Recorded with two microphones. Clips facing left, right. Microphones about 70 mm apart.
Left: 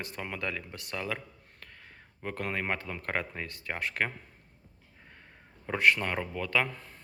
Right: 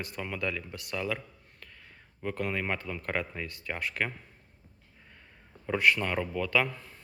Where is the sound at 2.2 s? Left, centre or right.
Left.